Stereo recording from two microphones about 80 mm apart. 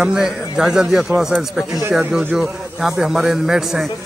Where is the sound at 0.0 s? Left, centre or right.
Centre.